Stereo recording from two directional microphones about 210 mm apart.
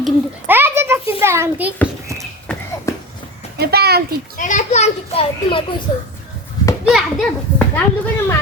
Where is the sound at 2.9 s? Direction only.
15° left (ahead or behind).